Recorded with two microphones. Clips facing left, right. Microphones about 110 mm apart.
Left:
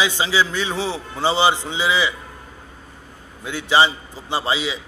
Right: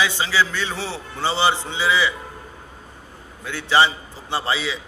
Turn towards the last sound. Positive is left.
turn(degrees=15)  # may be behind; listen again after turning